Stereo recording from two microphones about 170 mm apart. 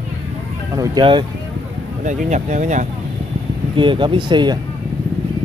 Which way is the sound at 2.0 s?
45° right (ahead or behind).